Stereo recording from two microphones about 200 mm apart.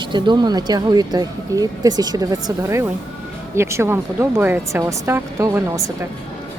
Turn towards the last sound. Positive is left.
turn(degrees=-15)  # may be behind; listen again after turning